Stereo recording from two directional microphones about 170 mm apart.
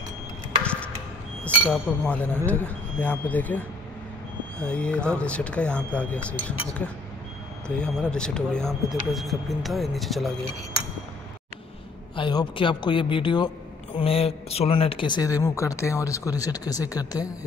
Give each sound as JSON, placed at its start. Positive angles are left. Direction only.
{"t": 1.7, "sound": "speech", "side_deg": 5}
{"t": 12.2, "sound": "speech", "side_deg": 25}